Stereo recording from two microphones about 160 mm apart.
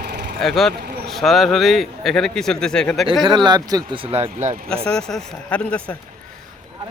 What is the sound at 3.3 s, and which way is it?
Speech, 25° right (ahead or behind).